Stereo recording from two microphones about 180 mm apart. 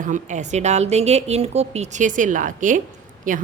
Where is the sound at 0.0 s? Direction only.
45° right (ahead or behind).